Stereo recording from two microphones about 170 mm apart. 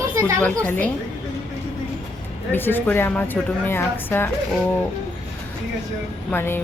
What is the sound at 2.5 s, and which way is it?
Speech, 10° left (ahead or behind).